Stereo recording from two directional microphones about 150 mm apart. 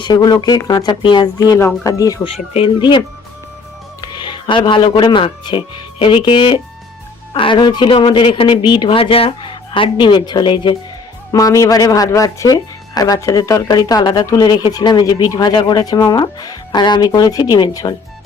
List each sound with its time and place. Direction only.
0.0 s speech: 25° left (ahead or behind)
2.2 s speech: 40° left (ahead or behind)
4.0 s speech: 30° left (ahead or behind)